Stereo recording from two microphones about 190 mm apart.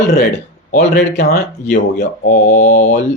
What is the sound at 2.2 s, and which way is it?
Mantra, 40° left (ahead or behind).